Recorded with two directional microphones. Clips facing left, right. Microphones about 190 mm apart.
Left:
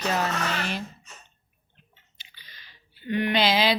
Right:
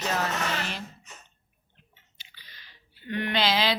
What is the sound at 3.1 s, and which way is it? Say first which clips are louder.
Speech: left 3 dB; 10° left (ahead or behind).